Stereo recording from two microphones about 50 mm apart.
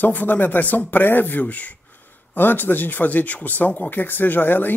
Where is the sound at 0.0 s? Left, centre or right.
Left.